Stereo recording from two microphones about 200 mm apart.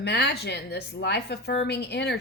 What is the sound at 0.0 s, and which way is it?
Speech, 55° left (ahead or behind).